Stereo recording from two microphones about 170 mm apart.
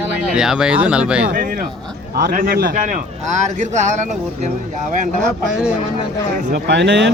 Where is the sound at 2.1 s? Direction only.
60° right (ahead or behind).